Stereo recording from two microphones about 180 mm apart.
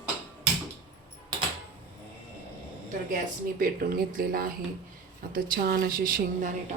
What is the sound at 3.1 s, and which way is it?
Speech, 50° right (ahead or behind).